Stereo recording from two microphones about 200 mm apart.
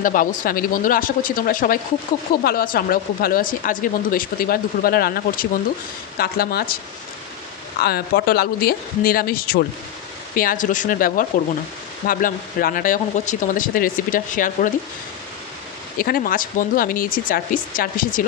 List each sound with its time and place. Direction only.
0.0 s speech: 40° left (ahead or behind)
7.8 s speech: 50° left (ahead or behind)
16.0 s speech: 45° left (ahead or behind)